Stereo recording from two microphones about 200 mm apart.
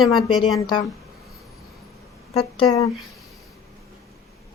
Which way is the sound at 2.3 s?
30° left (ahead or behind).